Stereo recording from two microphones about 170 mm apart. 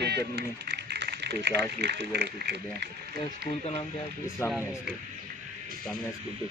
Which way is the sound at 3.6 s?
40° left (ahead or behind).